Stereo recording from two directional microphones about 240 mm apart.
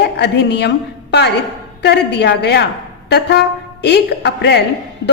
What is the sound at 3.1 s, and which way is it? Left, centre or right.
Wind instrument, left.